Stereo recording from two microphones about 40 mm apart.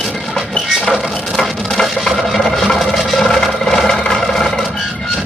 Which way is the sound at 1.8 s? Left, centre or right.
Centre.